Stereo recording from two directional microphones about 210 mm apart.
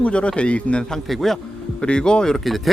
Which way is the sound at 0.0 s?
5° left (ahead or behind).